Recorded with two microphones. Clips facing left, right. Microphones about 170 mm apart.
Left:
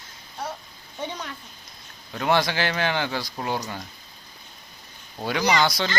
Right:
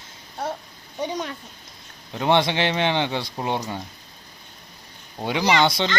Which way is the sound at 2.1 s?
25° right (ahead or behind).